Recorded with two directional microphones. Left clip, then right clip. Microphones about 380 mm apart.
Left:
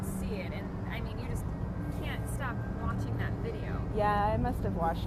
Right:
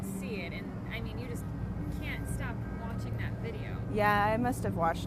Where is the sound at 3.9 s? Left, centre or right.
Right.